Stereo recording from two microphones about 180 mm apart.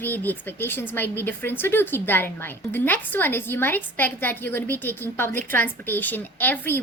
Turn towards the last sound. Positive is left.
turn(degrees=10)  # may be behind; listen again after turning